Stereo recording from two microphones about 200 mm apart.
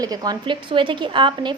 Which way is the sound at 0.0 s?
20° right (ahead or behind).